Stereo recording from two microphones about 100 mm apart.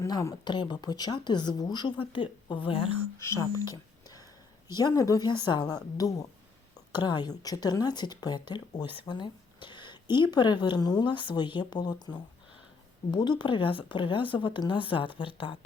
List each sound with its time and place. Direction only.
0.1 s a woman's voice: 30° left (ahead or behind)
0.4 s a woman's voice: 50° left (ahead or behind)
2.0 s speech: 60° left (ahead or behind)
3.2 s speech: 30° left (ahead or behind)
3.6 s a sound: 35° left (ahead or behind)
4.7 s a woman's voice: 40° left (ahead or behind); by 15.5 s 60° left (ahead or behind)